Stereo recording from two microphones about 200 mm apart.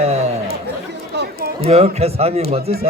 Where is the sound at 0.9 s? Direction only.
55° right (ahead or behind).